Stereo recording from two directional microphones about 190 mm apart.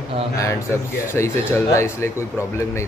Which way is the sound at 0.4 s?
15° left (ahead or behind).